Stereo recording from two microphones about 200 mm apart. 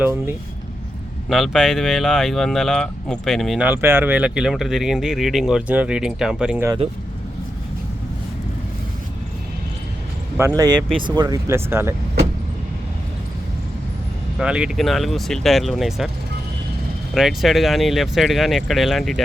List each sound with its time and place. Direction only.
0.0 s speech: 10° right (ahead or behind)
10.4 s speech: 10° right (ahead or behind)
14.3 s speech: 5° right (ahead or behind)
17.2 s speech: centre (ahead or behind)